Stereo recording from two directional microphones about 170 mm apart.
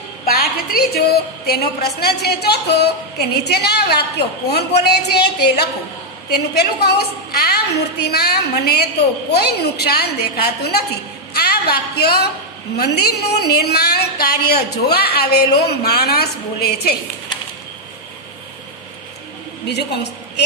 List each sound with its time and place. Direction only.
0.2 s a woman's voice: 60° left (ahead or behind)
19.7 s a woman's voice: 80° left